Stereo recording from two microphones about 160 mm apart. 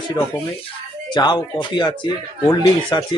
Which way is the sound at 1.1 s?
25° left (ahead or behind).